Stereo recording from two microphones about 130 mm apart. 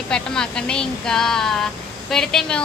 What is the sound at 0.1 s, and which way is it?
Speech, 5° left (ahead or behind).